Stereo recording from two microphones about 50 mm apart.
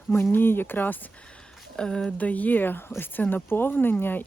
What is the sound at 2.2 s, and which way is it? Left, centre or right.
Speech, left.